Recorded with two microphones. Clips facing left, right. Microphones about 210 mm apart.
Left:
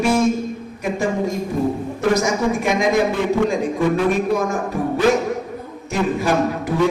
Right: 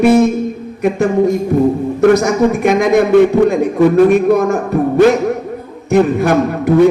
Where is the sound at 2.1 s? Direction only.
60° right (ahead or behind).